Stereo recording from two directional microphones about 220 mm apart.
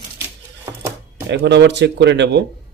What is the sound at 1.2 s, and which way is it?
Speech, 50° right (ahead or behind).